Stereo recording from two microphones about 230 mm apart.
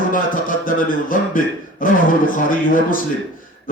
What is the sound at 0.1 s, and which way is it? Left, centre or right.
A man's voice, left.